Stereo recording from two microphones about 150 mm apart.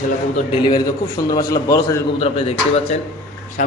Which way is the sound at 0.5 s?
30° left (ahead or behind).